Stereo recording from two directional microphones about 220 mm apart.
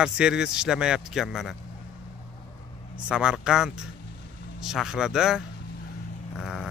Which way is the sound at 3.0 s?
5° right (ahead or behind).